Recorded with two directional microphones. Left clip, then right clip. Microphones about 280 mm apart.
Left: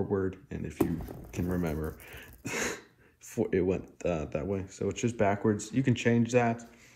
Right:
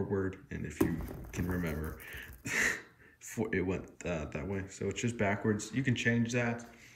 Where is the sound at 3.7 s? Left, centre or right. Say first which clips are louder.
Left 6 dB; centre.